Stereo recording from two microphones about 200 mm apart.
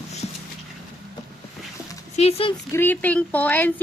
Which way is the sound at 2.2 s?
30° left (ahead or behind).